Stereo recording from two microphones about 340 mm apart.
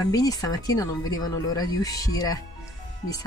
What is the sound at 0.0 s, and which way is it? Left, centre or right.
Speech, centre.